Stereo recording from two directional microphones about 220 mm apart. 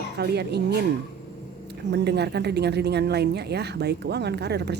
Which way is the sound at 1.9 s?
50° right (ahead or behind).